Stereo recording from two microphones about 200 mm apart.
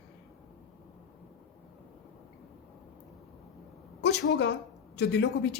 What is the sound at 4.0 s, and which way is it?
A woman's voice, 60° left (ahead or behind).